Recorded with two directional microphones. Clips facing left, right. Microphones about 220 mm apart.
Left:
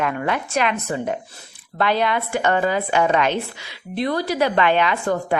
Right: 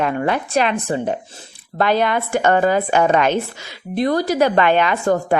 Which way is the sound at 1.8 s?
45° right (ahead or behind).